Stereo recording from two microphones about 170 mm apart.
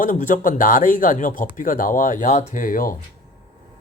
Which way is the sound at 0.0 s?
50° left (ahead or behind).